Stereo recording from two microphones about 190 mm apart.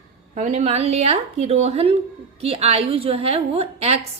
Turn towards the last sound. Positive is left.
turn(degrees=-35)  # may be behind; listen again after turning